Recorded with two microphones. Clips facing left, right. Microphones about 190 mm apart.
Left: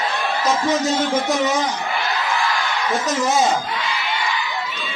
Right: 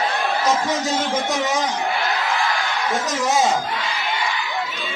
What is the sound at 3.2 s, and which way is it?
Speech, centre (ahead or behind).